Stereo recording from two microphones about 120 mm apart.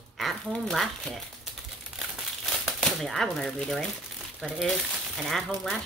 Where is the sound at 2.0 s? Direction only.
Centre (ahead or behind).